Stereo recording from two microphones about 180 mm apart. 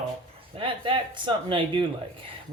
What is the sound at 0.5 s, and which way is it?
Speech, 30° right (ahead or behind).